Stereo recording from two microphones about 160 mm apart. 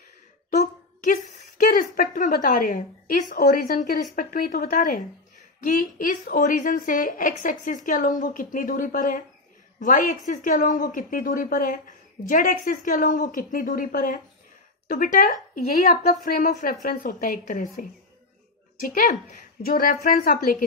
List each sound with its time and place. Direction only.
0.6 s a woman's voice: 50° left (ahead or behind)